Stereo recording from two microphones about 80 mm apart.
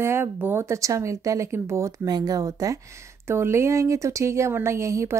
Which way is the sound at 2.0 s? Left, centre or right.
Right.